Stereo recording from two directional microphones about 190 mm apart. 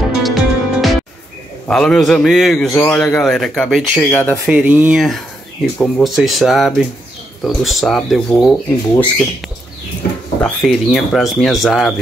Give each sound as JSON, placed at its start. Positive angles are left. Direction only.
{"t": 0.2, "sound": "music", "side_deg": 0}
{"t": 1.7, "sound": "a man's voice", "side_deg": 5}
{"t": 4.5, "sound": "a man's voice", "side_deg": -5}
{"t": 10.4, "sound": "a man's voice", "side_deg": 0}